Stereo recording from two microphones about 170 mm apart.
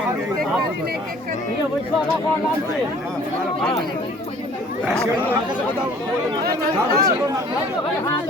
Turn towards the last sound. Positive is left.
turn(degrees=-65)  # may be behind; listen again after turning